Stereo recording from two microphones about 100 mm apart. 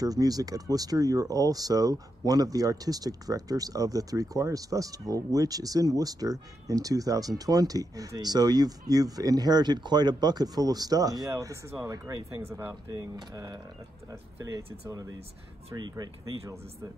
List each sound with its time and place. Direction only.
0.0 s speech: 40° right (ahead or behind)